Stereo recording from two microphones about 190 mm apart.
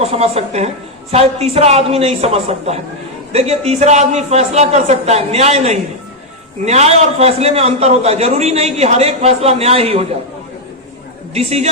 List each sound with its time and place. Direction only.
0.0 s a man's voice: 30° right (ahead or behind)
11.3 s a man's voice: 35° right (ahead or behind)